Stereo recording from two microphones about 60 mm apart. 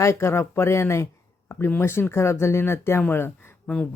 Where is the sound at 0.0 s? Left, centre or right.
Left.